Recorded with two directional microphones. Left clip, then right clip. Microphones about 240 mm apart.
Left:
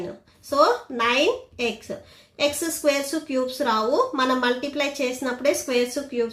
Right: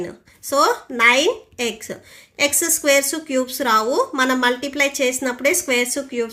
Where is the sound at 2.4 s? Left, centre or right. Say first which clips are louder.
Right 3 dB; right.